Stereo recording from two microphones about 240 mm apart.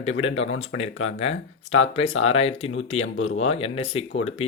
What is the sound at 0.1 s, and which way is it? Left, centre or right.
Speech, left.